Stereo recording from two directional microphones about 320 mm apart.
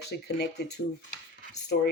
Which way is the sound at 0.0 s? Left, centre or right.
Left.